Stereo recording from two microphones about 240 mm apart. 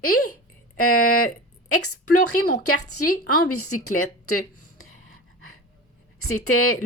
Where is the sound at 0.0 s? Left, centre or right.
Left.